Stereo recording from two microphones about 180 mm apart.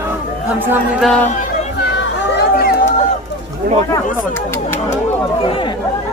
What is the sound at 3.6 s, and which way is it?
Speech, 60° right (ahead or behind).